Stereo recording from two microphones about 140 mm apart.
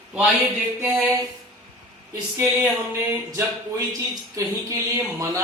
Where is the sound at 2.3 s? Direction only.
15° right (ahead or behind).